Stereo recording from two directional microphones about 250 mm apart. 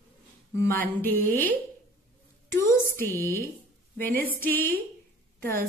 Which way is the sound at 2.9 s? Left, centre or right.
Centre.